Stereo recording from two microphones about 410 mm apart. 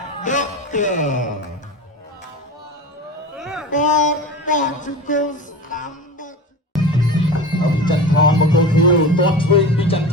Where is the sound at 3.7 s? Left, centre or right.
Centre.